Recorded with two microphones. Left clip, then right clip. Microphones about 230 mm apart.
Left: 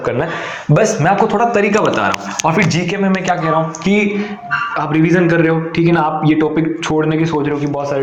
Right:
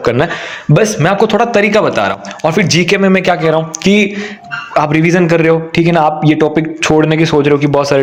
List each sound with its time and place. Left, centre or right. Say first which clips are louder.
0.0 s speech: right 5 dB; right